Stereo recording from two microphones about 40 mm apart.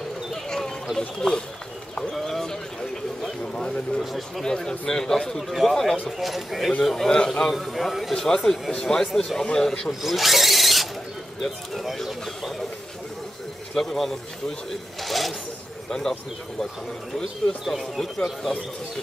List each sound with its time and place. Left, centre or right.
0.3 s a sound: centre
0.9 s speech: centre
2.1 s a sound: centre
3.5 s a man's voice: centre
5.5 s speech: centre
6.8 s a man's voice: centre
7.5 s speech: centre
8.1 s a man's voice: centre
9.8 s speech: centre
13.7 s a man's voice: centre
15.9 s a man's voice: centre
17.6 s speech: centre